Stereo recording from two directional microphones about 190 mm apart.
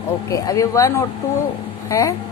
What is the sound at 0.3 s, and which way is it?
A woman's voice, 15° left (ahead or behind).